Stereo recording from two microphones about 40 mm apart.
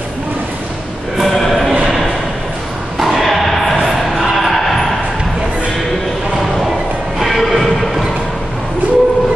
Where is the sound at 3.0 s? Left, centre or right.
Centre.